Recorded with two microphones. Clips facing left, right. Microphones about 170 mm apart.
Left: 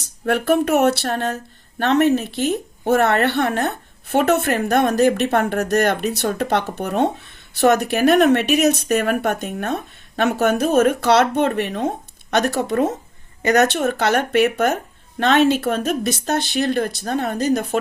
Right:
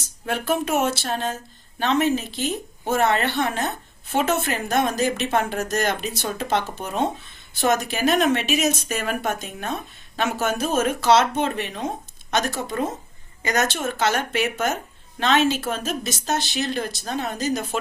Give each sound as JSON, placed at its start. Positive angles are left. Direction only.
{"t": 0.3, "sound": "speech", "side_deg": 60}